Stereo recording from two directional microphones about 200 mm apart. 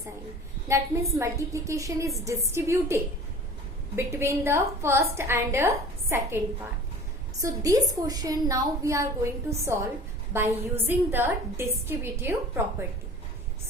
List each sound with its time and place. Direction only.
1.2 s a woman's voice: 15° right (ahead or behind)
7.4 s a woman's voice: 15° right (ahead or behind)